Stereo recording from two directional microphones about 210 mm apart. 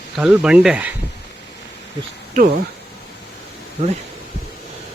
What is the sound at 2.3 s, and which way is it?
Speech, 45° right (ahead or behind).